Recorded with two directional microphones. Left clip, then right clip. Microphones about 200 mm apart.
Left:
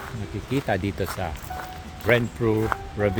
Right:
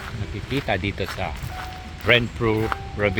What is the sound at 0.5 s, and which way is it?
Speech, 20° left (ahead or behind).